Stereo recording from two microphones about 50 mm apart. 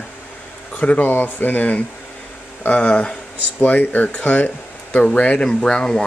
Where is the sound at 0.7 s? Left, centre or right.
Left.